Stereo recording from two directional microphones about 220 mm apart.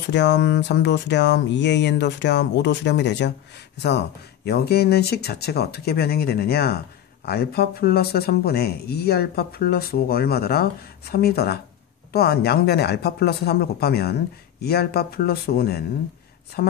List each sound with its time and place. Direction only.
0.1 s speech: 50° left (ahead or behind)